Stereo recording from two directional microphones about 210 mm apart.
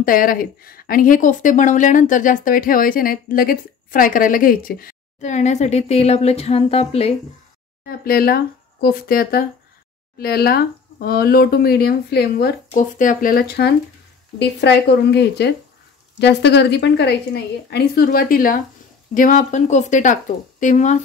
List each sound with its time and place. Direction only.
0.0 s speech: 40° left (ahead or behind)
7.8 s speech: 45° left (ahead or behind)